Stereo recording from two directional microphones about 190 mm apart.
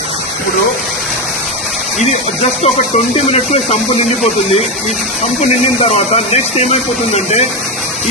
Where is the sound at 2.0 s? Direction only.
35° left (ahead or behind).